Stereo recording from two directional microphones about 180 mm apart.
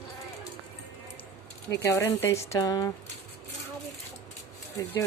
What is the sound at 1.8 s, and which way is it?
Speech, 15° left (ahead or behind).